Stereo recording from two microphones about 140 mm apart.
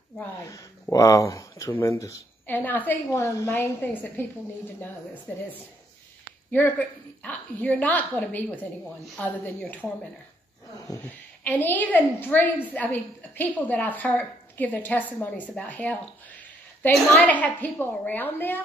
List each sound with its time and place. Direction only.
0.9 s a woman's voice: 20° left (ahead or behind)
7.2 s a woman's voice: 10° left (ahead or behind)
11.1 s a woman's voice: 10° left (ahead or behind)